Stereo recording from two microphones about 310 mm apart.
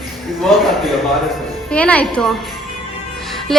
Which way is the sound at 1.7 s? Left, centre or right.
Centre.